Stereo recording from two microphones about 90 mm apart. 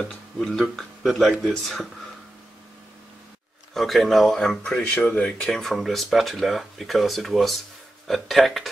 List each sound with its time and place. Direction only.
0.0 s speech: 5° left (ahead or behind)
3.7 s speech: centre (ahead or behind)